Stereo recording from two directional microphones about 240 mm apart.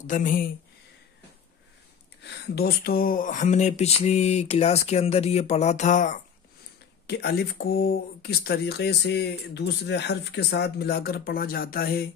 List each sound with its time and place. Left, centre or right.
0.0 s speech: left
2.2 s speech: left
7.1 s speech: left